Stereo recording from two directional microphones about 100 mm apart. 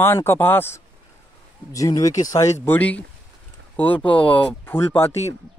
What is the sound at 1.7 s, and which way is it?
Speech, 35° left (ahead or behind).